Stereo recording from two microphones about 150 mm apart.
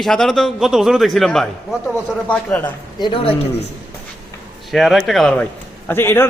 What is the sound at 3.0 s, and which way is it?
Speech, 35° left (ahead or behind).